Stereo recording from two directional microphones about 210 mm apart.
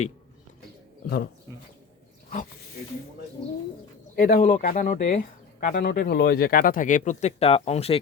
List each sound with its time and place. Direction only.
4.1 s speech: 45° left (ahead or behind)